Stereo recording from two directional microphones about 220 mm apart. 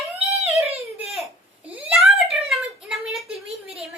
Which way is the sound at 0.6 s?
25° right (ahead or behind).